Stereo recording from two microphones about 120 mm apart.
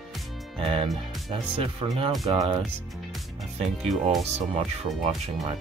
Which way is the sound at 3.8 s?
Centre (ahead or behind).